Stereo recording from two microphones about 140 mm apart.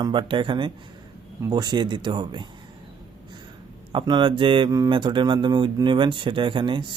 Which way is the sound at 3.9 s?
35° right (ahead or behind).